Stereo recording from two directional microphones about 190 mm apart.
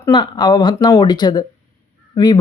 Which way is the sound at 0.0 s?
20° left (ahead or behind).